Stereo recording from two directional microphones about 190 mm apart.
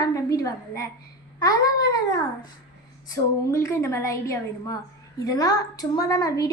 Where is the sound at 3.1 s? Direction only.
15° left (ahead or behind).